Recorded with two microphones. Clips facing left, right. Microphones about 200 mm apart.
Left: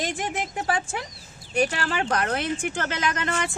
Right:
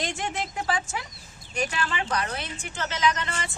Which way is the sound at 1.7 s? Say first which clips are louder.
Left 3 dB; 55° left (ahead or behind).